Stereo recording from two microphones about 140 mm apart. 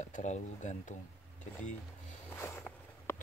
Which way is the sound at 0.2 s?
55° left (ahead or behind).